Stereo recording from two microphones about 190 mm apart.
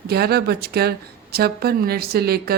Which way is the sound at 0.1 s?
55° right (ahead or behind).